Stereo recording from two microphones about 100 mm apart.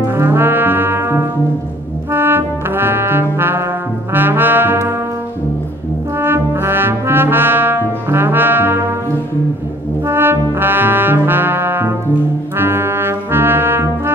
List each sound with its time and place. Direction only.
0.1 s brass instrument: 25° right (ahead or behind)
2.1 s trombone: 20° right (ahead or behind)
6.1 s brass instrument: 20° right (ahead or behind)
10.0 s brass instrument: 25° right (ahead or behind)